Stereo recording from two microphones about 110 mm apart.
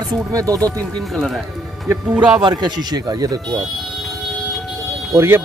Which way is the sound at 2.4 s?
40° right (ahead or behind).